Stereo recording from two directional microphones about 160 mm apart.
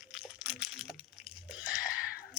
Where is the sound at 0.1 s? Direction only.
5° right (ahead or behind).